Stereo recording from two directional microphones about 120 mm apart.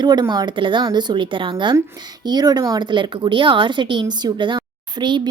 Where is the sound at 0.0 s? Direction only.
35° right (ahead or behind).